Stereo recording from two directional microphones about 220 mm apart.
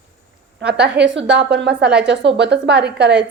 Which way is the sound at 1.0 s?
55° right (ahead or behind).